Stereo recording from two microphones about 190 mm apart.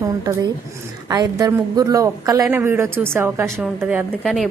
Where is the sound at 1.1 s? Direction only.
20° right (ahead or behind).